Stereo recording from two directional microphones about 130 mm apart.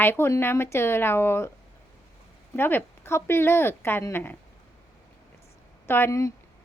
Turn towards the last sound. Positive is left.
turn(degrees=25)  # may be behind; listen again after turning